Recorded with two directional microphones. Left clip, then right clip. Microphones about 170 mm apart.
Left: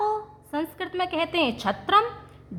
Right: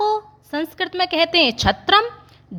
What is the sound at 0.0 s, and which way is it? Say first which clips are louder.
A woman's voice: right 6 dB; 35° right (ahead or behind).